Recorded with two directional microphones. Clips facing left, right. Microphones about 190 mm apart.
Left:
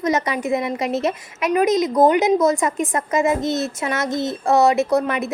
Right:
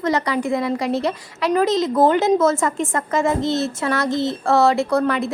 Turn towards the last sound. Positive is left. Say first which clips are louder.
# even
turn(degrees=20)  # may be behind; listen again after turning